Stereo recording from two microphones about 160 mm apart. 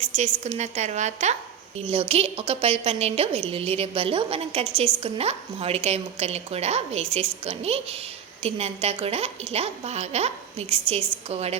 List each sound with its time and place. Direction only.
0.0 s a woman's voice: 45° right (ahead or behind)
1.9 s a woman's voice: 35° right (ahead or behind)